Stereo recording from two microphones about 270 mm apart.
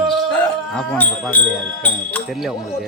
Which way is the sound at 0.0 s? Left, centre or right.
Centre.